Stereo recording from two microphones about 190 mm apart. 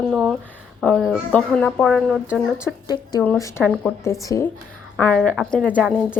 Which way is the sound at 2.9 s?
20° left (ahead or behind).